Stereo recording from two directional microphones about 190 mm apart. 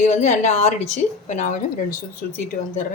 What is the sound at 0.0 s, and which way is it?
Speech, 35° left (ahead or behind).